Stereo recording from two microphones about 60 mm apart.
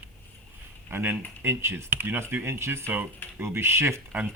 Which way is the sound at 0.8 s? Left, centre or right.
Right.